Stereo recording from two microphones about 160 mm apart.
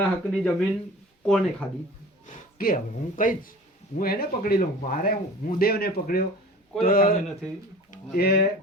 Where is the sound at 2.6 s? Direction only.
65° left (ahead or behind).